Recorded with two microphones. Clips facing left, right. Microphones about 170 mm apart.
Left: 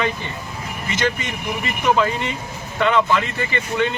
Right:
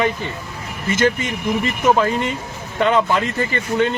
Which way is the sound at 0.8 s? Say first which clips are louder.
Right 5 dB; 50° right (ahead or behind).